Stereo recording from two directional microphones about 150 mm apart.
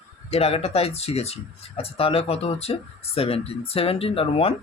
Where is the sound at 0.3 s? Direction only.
45° left (ahead or behind).